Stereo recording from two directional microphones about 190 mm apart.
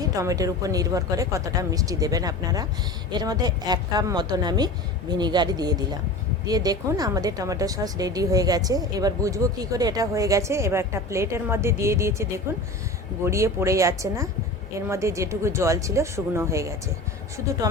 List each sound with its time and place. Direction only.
0.2 s a woman's voice: 15° right (ahead or behind)